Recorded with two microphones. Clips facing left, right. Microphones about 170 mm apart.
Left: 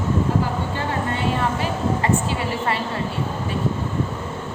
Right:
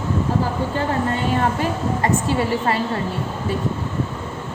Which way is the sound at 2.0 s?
40° right (ahead or behind).